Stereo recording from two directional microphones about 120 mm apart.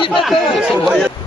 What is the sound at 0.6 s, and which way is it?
Speech, centre (ahead or behind).